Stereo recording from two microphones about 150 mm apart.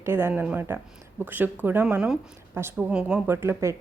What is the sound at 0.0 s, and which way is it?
A woman's voice, 15° right (ahead or behind).